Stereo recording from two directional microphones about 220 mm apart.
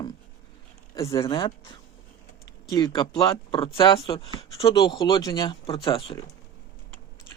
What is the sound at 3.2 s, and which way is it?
Speech, 20° left (ahead or behind).